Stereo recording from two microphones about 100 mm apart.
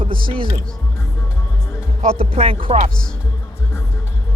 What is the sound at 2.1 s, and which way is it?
Speech, 80° right.